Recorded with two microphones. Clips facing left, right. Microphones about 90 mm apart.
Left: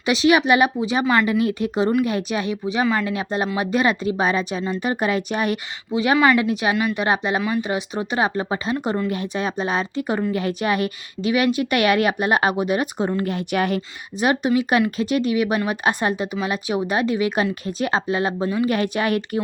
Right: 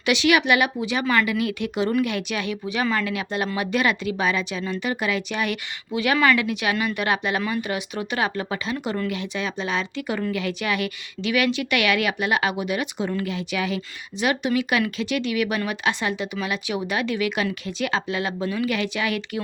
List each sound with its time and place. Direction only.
0.0 s speech: 30° left (ahead or behind)
1.0 s speech: 25° left (ahead or behind)
1.3 s speech: 35° left (ahead or behind)
2.8 s speech: 15° left (ahead or behind)
3.1 s speech: 30° left (ahead or behind)
9.0 s speech: 40° left (ahead or behind)
14.2 s speech: 35° left (ahead or behind)
15.7 s speech: 40° left (ahead or behind)